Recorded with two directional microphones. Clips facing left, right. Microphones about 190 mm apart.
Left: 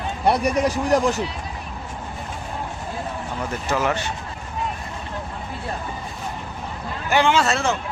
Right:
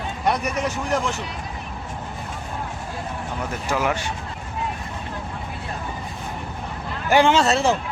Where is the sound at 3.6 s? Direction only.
10° right (ahead or behind).